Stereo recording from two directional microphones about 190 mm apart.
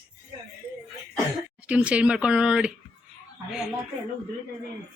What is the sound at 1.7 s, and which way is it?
Speech, 5° right (ahead or behind).